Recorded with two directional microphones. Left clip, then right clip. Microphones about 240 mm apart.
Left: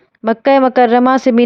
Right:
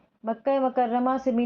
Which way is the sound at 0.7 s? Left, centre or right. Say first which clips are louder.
Left 14 dB; left.